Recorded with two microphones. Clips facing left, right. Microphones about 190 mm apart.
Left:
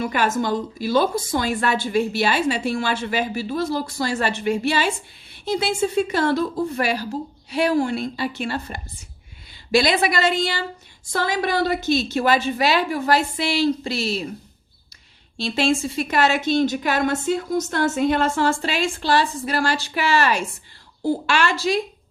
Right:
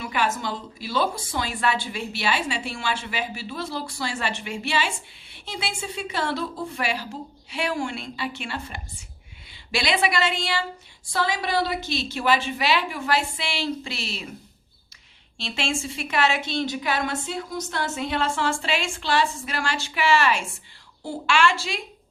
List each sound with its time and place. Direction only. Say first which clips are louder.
0.0 s a woman's voice: left 5 dB; 45° left (ahead or behind)
15.4 s a woman's voice: left 8 dB; 40° left (ahead or behind)